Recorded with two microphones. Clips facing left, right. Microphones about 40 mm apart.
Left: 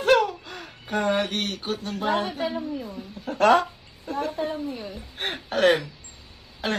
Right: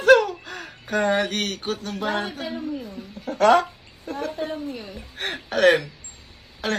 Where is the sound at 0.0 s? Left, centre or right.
Right.